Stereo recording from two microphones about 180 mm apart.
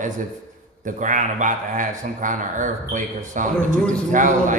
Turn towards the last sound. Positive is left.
turn(degrees=-45)  # may be behind; listen again after turning